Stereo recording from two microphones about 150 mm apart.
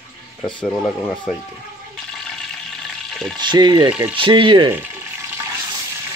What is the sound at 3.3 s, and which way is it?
Speech, 30° right (ahead or behind).